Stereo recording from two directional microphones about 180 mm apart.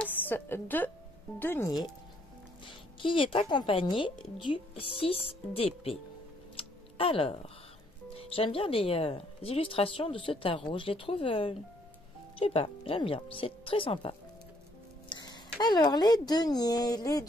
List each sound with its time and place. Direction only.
0.0 s a woman's voice: 10° left (ahead or behind)
2.6 s speech: 30° left (ahead or behind)
6.5 s music: 30° left (ahead or behind)
8.1 s speech: 30° left (ahead or behind)